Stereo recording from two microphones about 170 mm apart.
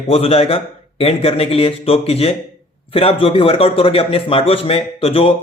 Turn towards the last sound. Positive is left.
turn(degrees=35)  # may be behind; listen again after turning